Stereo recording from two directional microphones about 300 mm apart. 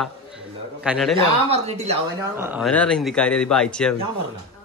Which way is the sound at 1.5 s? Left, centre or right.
Right.